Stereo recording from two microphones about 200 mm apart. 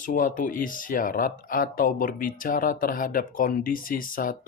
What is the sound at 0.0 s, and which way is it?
Speech, 40° left (ahead or behind).